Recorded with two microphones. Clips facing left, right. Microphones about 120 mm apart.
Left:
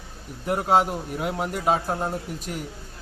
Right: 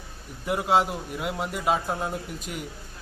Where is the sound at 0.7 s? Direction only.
40° left (ahead or behind).